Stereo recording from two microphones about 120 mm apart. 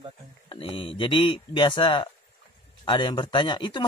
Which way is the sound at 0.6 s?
45° left (ahead or behind).